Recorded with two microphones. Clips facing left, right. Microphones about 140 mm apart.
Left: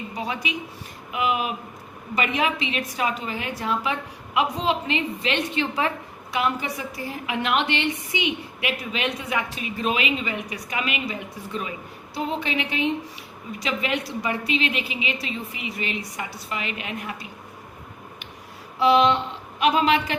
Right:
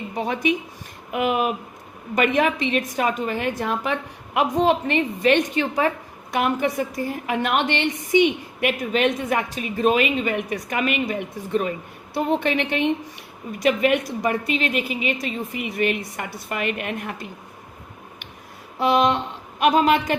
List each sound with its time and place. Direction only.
0.2 s a woman's voice: 50° right (ahead or behind)
18.8 s a woman's voice: 50° right (ahead or behind)